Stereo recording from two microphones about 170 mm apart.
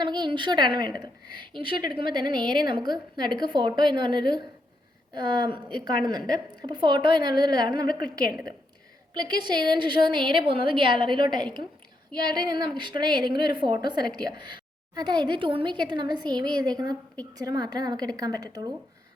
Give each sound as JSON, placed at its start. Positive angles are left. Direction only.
{"t": 0.0, "sound": "a woman's voice", "side_deg": -25}
{"t": 9.1, "sound": "a woman's voice", "side_deg": -25}